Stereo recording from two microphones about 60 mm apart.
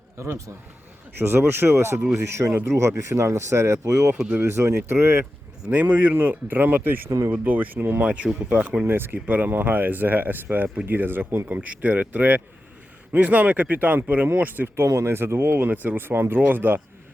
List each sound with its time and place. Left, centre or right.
0.2 s a man's voice: right
1.2 s speech: right
5.6 s speech: right
8.0 s speech: centre
8.9 s speech: right
14.8 s speech: right